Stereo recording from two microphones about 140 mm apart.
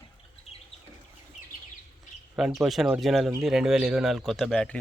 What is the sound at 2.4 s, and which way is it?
Speech, centre (ahead or behind).